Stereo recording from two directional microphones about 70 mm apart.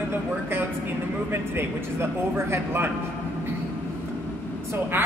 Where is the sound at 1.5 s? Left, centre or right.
Right.